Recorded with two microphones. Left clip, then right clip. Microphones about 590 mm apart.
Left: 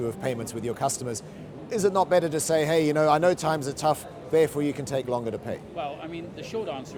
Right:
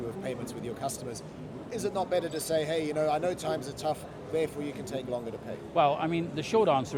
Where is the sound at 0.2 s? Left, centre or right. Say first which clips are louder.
Left 6 dB; left.